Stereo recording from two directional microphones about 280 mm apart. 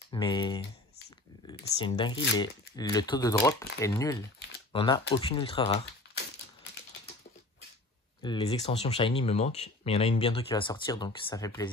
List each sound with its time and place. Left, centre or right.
0.1 s speech: centre
8.2 s speech: centre